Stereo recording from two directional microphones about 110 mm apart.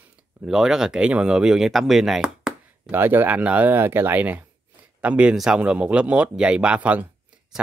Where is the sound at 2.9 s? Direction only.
20° right (ahead or behind).